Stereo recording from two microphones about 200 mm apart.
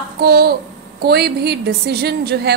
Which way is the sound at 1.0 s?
55° right (ahead or behind).